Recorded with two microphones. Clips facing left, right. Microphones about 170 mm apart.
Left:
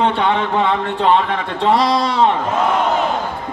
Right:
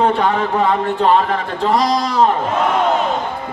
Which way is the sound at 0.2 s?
40° right (ahead or behind).